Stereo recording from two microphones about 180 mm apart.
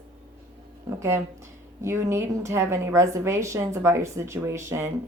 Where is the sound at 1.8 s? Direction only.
15° right (ahead or behind).